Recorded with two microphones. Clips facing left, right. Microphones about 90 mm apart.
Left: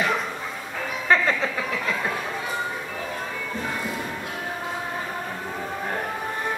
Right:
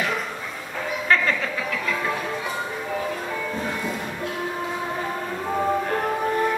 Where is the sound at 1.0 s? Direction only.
20° left (ahead or behind).